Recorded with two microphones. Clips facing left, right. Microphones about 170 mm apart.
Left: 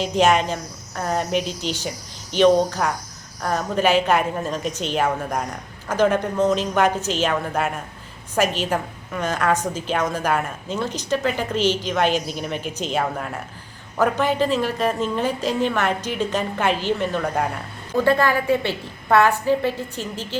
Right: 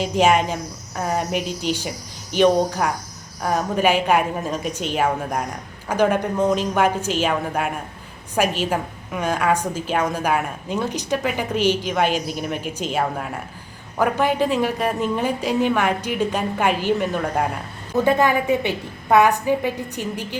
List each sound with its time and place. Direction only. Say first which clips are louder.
0.0 s a woman's voice: even; 10° right (ahead or behind)
17.9 s a woman's voice: right 1 dB; 15° right (ahead or behind)